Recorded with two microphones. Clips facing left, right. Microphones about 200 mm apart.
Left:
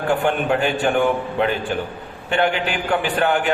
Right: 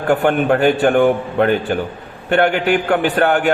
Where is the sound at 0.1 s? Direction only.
55° right (ahead or behind).